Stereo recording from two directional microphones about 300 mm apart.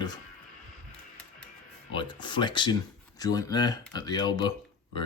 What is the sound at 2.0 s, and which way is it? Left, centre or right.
Speech, centre.